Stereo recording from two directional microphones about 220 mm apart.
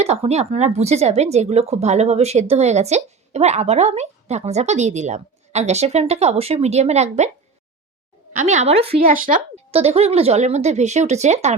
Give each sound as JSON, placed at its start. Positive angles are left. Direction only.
{"t": 0.0, "sound": "a woman's voice", "side_deg": -30}
{"t": 8.4, "sound": "a woman's voice", "side_deg": -30}
{"t": 9.0, "sound": "a woman's voice", "side_deg": -40}